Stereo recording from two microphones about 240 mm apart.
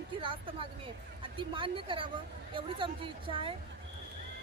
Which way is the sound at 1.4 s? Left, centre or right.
Right.